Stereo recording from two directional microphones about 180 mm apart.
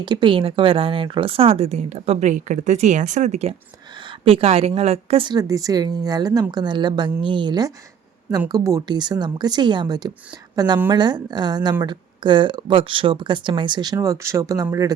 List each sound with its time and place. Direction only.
0.0 s speech: 25° right (ahead or behind)